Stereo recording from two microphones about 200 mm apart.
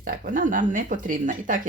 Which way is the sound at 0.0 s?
45° right (ahead or behind).